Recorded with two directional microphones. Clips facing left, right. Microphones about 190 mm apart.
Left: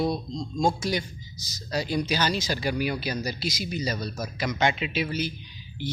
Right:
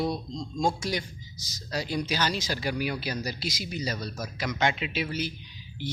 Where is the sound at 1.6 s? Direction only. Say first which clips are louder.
Left 3 dB; 25° left (ahead or behind).